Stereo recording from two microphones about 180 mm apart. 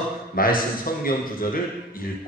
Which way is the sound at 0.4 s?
55° left (ahead or behind).